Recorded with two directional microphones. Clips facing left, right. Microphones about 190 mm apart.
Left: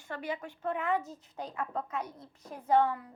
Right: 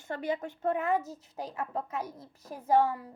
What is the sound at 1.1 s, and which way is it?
Speech, 5° right (ahead or behind).